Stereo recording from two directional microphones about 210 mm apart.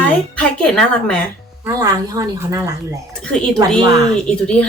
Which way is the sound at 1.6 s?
15° right (ahead or behind).